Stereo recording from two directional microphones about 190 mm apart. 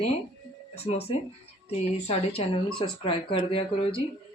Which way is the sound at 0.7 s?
35° left (ahead or behind).